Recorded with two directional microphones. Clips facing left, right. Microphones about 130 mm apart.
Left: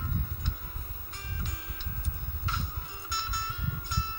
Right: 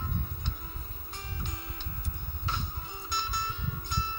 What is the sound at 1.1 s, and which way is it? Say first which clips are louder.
Music: right 1 dB; 30° right (ahead or behind).